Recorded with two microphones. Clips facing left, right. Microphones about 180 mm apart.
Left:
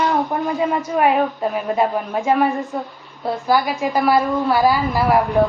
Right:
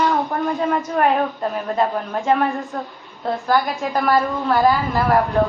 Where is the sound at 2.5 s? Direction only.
Centre (ahead or behind).